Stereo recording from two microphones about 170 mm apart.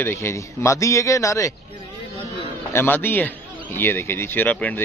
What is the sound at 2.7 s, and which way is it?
A man's voice, 15° left (ahead or behind).